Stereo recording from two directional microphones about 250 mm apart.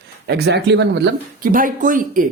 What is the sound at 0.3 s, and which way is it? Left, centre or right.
Speech, right.